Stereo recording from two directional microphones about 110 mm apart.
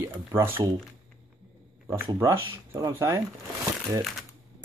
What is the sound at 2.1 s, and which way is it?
Speech, 30° right (ahead or behind).